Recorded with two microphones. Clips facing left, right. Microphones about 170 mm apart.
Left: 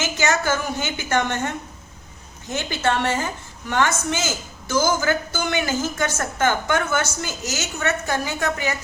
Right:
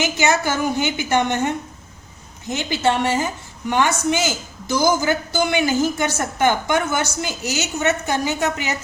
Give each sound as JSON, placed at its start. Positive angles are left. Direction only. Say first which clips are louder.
{"t": 0.0, "sound": "a woman's voice", "louder": "right 3 dB", "side_deg": -15}
{"t": 2.6, "sound": "a woman's voice", "louder": "right 3 dB", "side_deg": -15}